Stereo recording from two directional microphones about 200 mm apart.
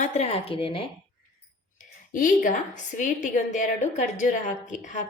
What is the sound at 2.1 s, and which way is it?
A woman's voice, 40° left (ahead or behind).